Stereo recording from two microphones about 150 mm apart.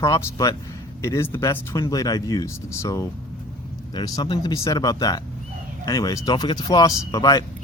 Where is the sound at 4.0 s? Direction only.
30° left (ahead or behind).